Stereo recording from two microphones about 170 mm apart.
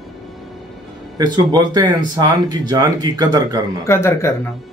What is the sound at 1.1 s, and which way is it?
Speech, 20° right (ahead or behind).